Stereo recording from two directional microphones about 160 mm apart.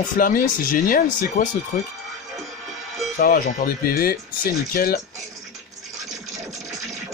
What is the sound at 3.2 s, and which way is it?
Speech, 60° left (ahead or behind).